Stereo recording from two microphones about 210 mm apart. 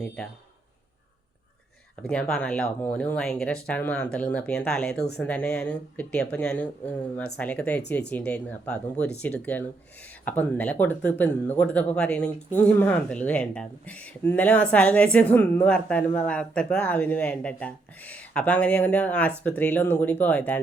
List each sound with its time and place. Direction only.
2.0 s speech: 5° left (ahead or behind)